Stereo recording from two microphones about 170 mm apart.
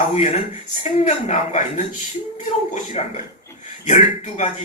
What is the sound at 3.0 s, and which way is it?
A man's voice, 40° left (ahead or behind).